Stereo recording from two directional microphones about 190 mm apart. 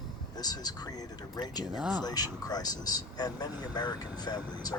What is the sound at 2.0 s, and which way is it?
Speech, 20° left (ahead or behind).